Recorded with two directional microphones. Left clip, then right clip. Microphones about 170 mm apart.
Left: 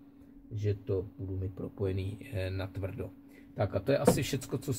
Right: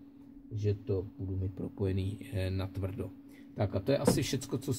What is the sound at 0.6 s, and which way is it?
Speech, centre (ahead or behind).